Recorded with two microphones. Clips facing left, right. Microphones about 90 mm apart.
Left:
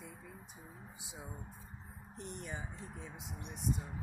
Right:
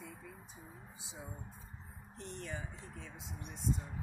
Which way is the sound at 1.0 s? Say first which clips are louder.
Even; 20° left (ahead or behind).